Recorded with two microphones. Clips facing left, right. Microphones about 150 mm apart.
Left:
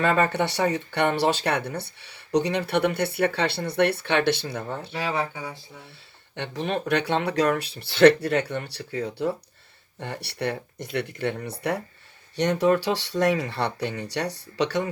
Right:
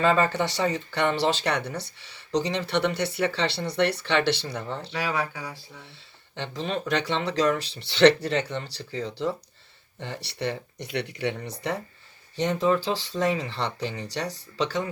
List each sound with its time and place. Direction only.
0.0 s speech: 60° left (ahead or behind)
4.9 s speech: 25° left (ahead or behind)
6.3 s speech: 60° left (ahead or behind)
12.4 s speech: 70° left (ahead or behind)